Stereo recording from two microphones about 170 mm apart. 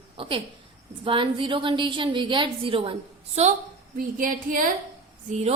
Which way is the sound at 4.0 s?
55° right (ahead or behind).